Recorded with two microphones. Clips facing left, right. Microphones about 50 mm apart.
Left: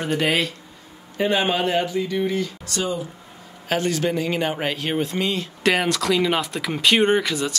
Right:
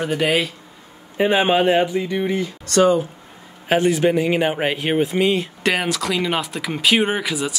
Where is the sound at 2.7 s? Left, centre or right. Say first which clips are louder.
Right 13 dB; right.